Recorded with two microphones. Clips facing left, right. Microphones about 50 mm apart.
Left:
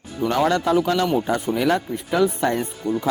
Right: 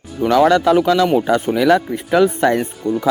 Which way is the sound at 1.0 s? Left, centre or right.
Right.